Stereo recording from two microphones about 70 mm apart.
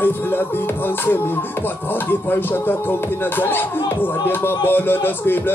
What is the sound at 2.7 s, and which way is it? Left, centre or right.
Music, left.